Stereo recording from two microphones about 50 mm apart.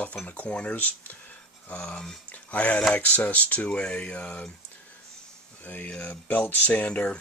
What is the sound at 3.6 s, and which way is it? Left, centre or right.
Speech, centre.